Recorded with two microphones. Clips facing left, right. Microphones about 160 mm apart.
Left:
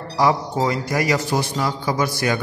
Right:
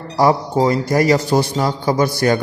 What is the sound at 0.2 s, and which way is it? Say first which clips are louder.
Speech: right 4 dB; 35° right (ahead or behind).